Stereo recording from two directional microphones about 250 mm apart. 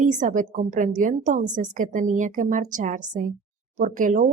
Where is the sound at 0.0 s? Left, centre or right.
Right.